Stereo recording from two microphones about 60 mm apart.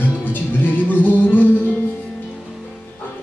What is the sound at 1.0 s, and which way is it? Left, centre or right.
Music, left.